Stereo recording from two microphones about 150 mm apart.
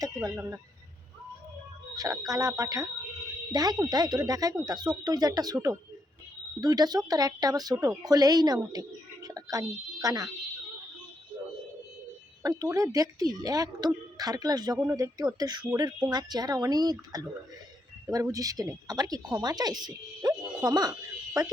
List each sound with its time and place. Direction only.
0.0 s speech: 25° right (ahead or behind)
2.0 s speech: 20° right (ahead or behind)
6.6 s speech: 25° right (ahead or behind)
12.4 s speech: 25° right (ahead or behind)